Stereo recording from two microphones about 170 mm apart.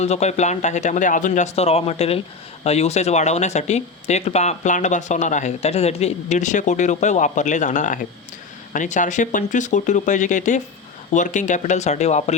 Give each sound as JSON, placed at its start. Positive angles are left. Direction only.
{"t": 0.0, "sound": "speech", "side_deg": 40}